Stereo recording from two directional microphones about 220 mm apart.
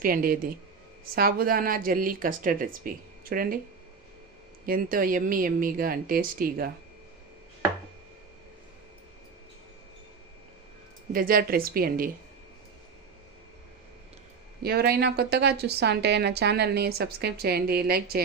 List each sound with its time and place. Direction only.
0.0 s speech: 40° right (ahead or behind)
4.6 s speech: 40° right (ahead or behind)
11.1 s speech: 40° right (ahead or behind)
14.6 s a woman's voice: 45° right (ahead or behind)